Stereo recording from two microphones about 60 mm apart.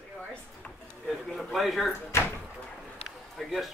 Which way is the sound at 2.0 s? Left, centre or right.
Left.